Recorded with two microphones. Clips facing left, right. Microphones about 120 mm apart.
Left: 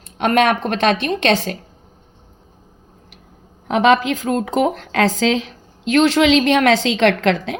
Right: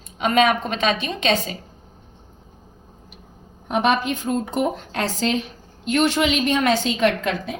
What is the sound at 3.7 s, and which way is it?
A woman's voice, 90° left.